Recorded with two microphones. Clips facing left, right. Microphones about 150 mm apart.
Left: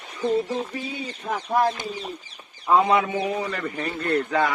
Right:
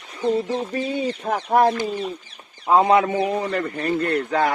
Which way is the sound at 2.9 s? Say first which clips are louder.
Right 4 dB; 55° right (ahead or behind).